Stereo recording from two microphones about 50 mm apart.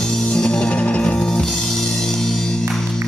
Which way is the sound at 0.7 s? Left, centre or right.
Left.